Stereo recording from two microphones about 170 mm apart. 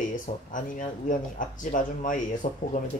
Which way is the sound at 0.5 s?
50° left (ahead or behind).